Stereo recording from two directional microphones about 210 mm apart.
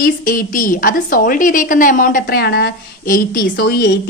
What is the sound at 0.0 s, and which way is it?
A woman's voice, 40° left (ahead or behind).